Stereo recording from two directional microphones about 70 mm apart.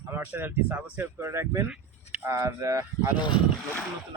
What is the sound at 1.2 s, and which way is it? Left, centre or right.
Speech, right.